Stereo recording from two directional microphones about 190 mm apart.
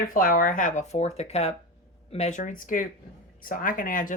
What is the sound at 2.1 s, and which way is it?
Speech, 35° left (ahead or behind).